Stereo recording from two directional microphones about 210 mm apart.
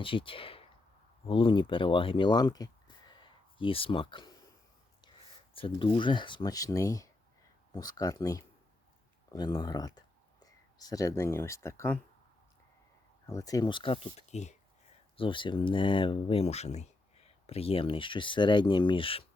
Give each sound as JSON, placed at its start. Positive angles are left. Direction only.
{"t": 0.0, "sound": "speech", "side_deg": 25}
{"t": 5.5, "sound": "speech", "side_deg": 25}
{"t": 13.2, "sound": "speech", "side_deg": 15}